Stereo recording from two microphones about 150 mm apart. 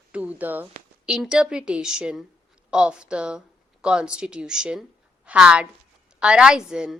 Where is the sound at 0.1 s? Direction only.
10° right (ahead or behind).